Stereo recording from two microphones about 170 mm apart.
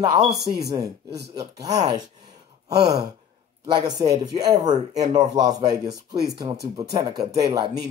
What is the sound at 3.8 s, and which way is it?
Speech, 20° right (ahead or behind).